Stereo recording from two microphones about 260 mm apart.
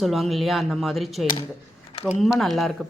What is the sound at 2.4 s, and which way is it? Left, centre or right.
Speech, centre.